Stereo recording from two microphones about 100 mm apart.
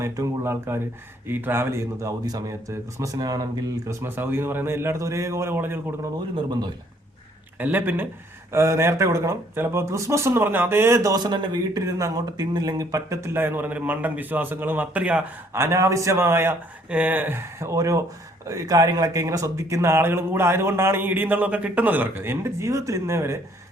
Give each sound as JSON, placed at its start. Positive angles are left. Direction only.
{"t": 0.0, "sound": "speech", "side_deg": -25}
{"t": 4.0, "sound": "a man's voice", "side_deg": -20}
{"t": 7.6, "sound": "a man's voice", "side_deg": -20}
{"t": 11.9, "sound": "a man's voice", "side_deg": -35}
{"t": 15.5, "sound": "a man's voice", "side_deg": -30}